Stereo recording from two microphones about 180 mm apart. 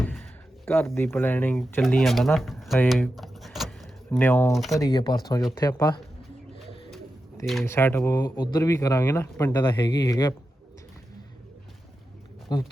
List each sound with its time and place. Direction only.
0.6 s speech: 15° left (ahead or behind)
2.9 s keys jangling: centre (ahead or behind)
4.2 s speech: 10° left (ahead or behind)
4.5 s speech: centre (ahead or behind)
4.8 s speech: 20° left (ahead or behind)
7.6 s speech: 15° left (ahead or behind)
12.5 s speech: 20° left (ahead or behind)